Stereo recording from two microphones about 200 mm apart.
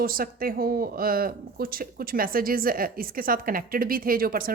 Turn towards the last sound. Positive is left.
turn(degrees=-45)  # may be behind; listen again after turning